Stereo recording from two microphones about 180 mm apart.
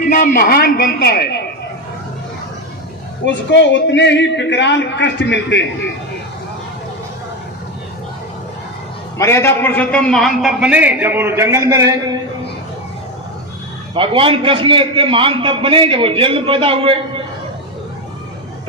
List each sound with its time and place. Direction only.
0.0 s a man's voice: 50° left (ahead or behind)
3.2 s a man's voice: 85° left
9.1 s a man's voice: 15° left (ahead or behind); by 11.9 s 15° right (ahead or behind)
13.9 s a man's voice: 30° right (ahead or behind)